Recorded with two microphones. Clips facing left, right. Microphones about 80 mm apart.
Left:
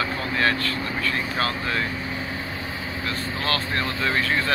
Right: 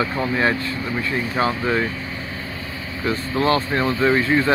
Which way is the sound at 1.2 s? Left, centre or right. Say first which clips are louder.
Right 8 dB; centre.